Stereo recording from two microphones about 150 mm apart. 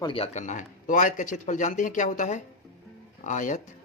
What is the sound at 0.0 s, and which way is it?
Speech, 35° left (ahead or behind).